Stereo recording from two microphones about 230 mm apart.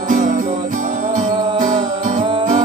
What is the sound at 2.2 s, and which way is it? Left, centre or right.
Music, right.